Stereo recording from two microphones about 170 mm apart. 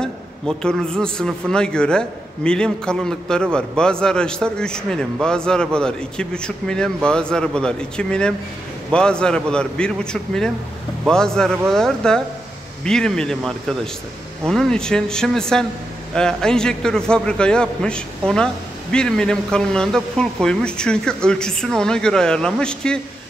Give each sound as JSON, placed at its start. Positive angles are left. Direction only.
{"t": 0.0, "sound": "a man's voice", "side_deg": 5}